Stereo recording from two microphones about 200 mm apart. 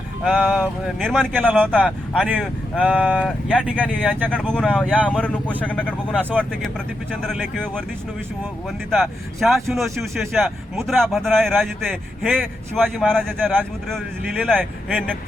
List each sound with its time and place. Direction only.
0.3 s speech: centre (ahead or behind)
2.8 s speech: 5° right (ahead or behind)
4.3 s speech: 5° left (ahead or behind)
8.9 s speech: centre (ahead or behind)